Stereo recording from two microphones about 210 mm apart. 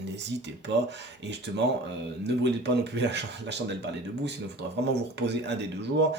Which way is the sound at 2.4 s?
55° right (ahead or behind).